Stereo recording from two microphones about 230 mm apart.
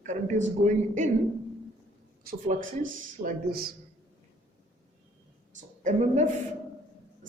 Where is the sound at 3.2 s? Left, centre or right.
Right.